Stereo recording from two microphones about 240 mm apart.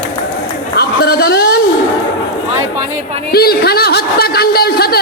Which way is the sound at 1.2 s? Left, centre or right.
Left.